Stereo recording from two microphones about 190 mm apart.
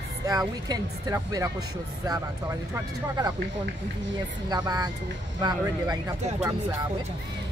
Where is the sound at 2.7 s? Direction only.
20° right (ahead or behind).